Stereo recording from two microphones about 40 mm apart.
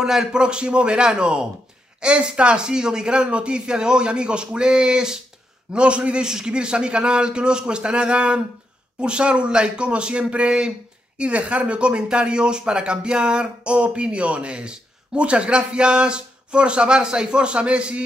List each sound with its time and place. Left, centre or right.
0.0 s speech: centre